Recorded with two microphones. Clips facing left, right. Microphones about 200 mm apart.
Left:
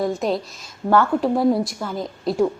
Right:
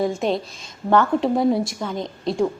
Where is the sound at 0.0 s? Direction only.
Centre (ahead or behind).